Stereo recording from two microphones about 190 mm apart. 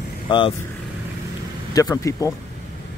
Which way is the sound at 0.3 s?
25° left (ahead or behind).